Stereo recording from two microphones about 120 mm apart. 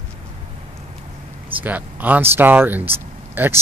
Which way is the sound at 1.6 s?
15° right (ahead or behind).